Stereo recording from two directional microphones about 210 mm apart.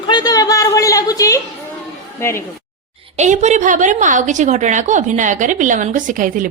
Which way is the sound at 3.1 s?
35° right (ahead or behind).